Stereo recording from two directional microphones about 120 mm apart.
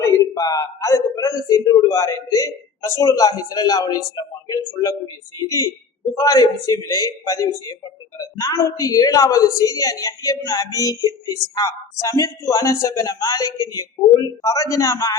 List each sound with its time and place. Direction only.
0.0 s a man's voice: 30° left (ahead or behind)